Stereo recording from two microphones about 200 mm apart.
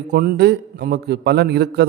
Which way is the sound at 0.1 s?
50° right (ahead or behind).